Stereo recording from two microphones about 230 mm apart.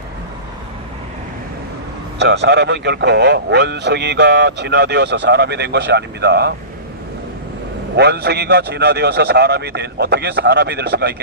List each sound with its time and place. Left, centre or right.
2.1 s a man's voice: right
7.9 s a man's voice: right